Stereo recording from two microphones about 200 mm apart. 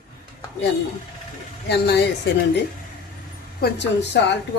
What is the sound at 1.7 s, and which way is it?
Speech, 55° left (ahead or behind).